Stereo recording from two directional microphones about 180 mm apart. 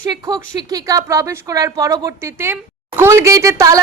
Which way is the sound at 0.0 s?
20° right (ahead or behind).